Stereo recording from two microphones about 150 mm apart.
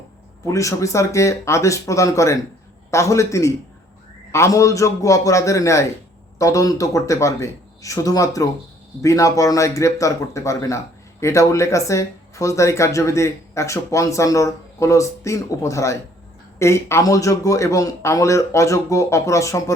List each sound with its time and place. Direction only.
0.4 s speech: 20° left (ahead or behind)